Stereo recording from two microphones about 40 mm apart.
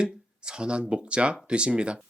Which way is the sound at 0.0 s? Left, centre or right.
Right.